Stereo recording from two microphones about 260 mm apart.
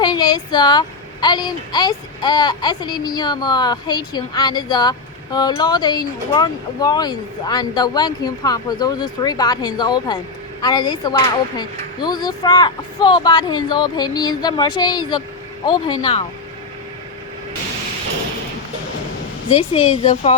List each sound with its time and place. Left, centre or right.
0.0 s a woman's voice: centre
19.5 s speech: left